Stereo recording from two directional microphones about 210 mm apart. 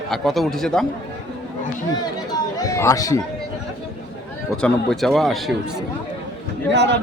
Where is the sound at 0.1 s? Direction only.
Centre (ahead or behind).